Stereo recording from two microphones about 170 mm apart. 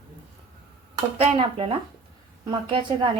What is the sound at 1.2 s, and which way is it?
Speech, 35° right (ahead or behind).